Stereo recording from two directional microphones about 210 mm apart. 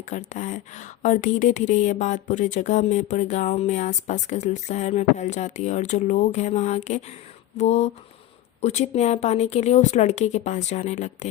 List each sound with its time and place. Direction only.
0.0 s speech: 35° left (ahead or behind)